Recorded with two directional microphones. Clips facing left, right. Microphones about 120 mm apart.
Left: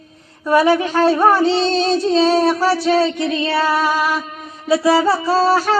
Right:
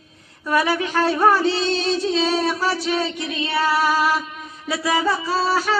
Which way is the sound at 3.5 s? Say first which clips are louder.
Even; 30° left (ahead or behind).